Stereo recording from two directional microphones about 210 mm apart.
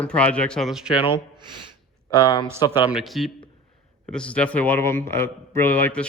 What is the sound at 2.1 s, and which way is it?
Speech, 20° left (ahead or behind).